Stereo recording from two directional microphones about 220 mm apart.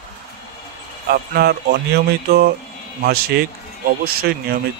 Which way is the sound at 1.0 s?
45° right (ahead or behind).